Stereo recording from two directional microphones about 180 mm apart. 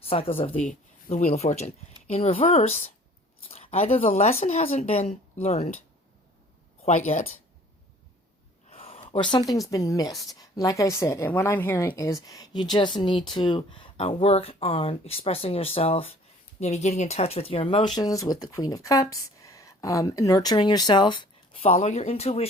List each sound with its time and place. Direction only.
0.0 s speech: 30° left (ahead or behind)
0.6 s speech: 45° left (ahead or behind)
8.7 s speech: 35° left (ahead or behind)